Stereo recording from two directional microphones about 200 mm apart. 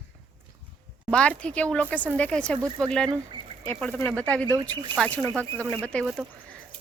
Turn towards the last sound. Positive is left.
turn(degrees=5)  # may be behind; listen again after turning